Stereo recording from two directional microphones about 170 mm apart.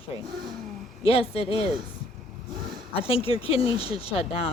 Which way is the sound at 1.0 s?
35° left (ahead or behind).